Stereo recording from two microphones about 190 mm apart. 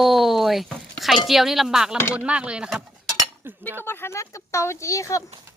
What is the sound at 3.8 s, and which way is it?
Speech, 10° left (ahead or behind).